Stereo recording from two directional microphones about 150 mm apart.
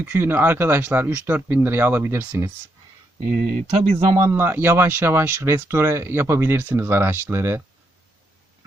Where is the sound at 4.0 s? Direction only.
20° right (ahead or behind).